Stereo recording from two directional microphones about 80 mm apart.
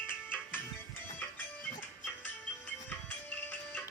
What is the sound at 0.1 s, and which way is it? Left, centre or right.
Music, left.